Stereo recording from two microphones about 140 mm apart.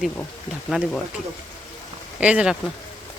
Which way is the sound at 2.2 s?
10° right (ahead or behind).